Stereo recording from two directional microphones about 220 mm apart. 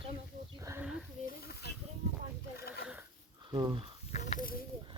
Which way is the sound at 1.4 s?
45° left (ahead or behind).